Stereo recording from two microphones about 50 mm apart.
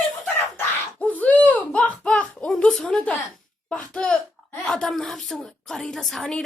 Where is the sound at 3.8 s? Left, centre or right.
Centre.